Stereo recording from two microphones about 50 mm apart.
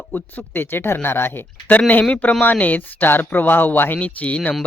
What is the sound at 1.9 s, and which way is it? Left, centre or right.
Speech, left.